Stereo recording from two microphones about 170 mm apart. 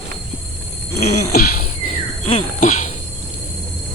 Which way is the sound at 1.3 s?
60° left (ahead or behind).